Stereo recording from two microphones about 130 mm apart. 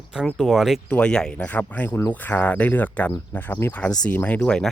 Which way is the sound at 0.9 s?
10° left (ahead or behind).